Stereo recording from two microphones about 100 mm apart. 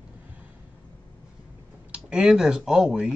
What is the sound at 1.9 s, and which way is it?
Speech, 10° right (ahead or behind).